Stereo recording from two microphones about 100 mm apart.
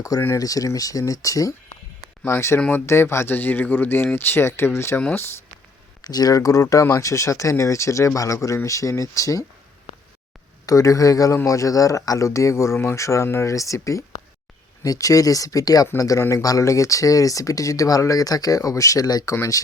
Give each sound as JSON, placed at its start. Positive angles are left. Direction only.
{"t": 0.3, "sound": "speech", "side_deg": 35}
{"t": 6.0, "sound": "speech", "side_deg": 40}
{"t": 10.7, "sound": "speech", "side_deg": 35}